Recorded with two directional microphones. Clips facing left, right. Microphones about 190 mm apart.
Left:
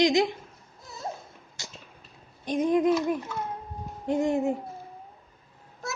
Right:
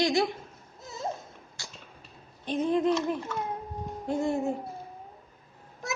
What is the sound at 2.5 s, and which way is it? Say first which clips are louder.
A woman's voice: left 3 dB; 15° left (ahead or behind).